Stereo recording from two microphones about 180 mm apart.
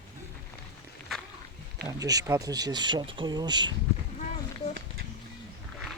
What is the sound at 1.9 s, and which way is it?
Speech, 20° right (ahead or behind).